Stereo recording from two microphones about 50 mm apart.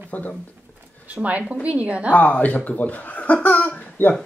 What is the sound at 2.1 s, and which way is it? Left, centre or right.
Speech, left.